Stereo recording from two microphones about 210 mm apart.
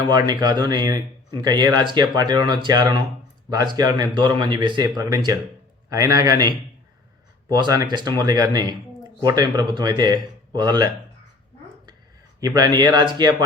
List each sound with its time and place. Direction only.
0.3 s speech: 20° right (ahead or behind)
7.5 s speech: 20° right (ahead or behind)
12.4 s speech: 15° right (ahead or behind)